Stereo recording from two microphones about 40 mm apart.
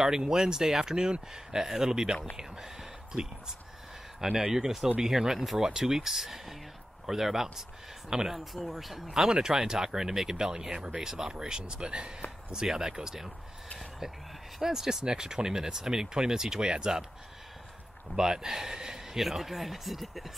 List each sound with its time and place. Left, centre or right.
0.0 s speech: centre
2.3 s whispering: centre
4.2 s speech: centre
8.5 s speech: centre
13.7 s a sound: centre
14.6 s speech: centre
18.1 s speech: centre
19.1 s speech: centre